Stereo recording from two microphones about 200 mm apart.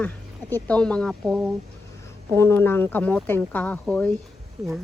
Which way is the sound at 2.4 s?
10° left (ahead or behind).